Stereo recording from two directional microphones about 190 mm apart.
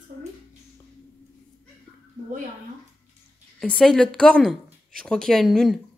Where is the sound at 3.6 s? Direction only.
5° left (ahead or behind).